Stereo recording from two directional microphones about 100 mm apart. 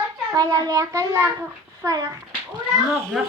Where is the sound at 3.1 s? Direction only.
5° right (ahead or behind).